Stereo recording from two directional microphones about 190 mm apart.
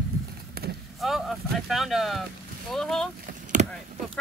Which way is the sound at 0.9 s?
Centre (ahead or behind).